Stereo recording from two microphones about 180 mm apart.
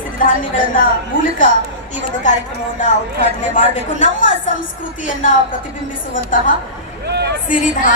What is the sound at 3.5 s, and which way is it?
Speech, 40° left (ahead or behind).